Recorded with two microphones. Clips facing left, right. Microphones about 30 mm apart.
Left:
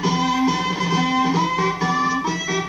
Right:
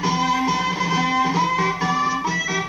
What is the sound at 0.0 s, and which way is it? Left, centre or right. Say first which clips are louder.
Music: left 1 dB; centre.